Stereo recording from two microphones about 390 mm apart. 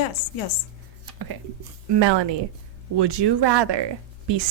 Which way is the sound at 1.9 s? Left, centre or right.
Right.